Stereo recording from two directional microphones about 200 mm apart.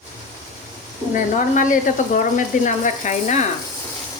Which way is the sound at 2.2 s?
40° left (ahead or behind).